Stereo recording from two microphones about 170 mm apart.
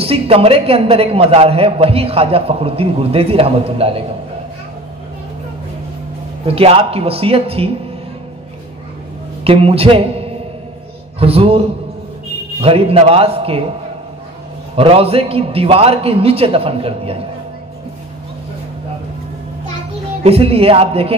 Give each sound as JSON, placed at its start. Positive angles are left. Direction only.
{"t": 0.0, "sound": "a man's voice", "side_deg": -35}
{"t": 6.4, "sound": "a man's voice", "side_deg": -35}
{"t": 9.4, "sound": "a man's voice", "side_deg": -35}
{"t": 12.6, "sound": "a man's voice", "side_deg": -35}
{"t": 14.8, "sound": "a man's voice", "side_deg": -35}
{"t": 20.2, "sound": "a man's voice", "side_deg": -35}